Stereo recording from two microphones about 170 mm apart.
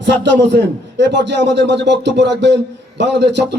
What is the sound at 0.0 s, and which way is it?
Speech, 85° right.